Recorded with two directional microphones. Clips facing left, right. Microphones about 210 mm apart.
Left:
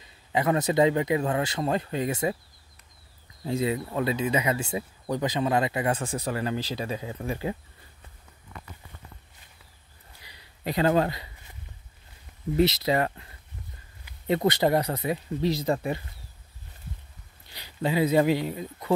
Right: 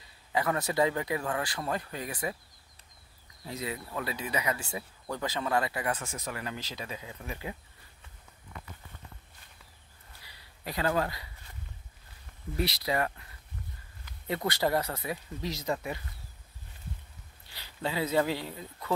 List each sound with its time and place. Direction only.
0.3 s speech: 20° left (ahead or behind)
3.4 s speech: 25° left (ahead or behind)
10.2 s a sound: 20° left (ahead or behind)
12.5 s speech: 25° left (ahead or behind)
17.6 s speech: 15° left (ahead or behind)